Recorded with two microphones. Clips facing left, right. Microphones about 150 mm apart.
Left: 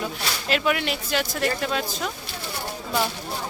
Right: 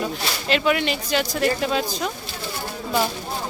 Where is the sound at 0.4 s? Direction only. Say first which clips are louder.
Right 3 dB; centre (ahead or behind).